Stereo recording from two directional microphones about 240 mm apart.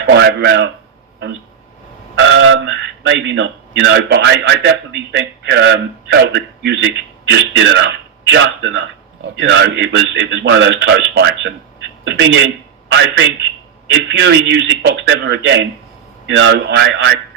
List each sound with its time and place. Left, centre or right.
0.1 s speech: right
2.1 s speech: right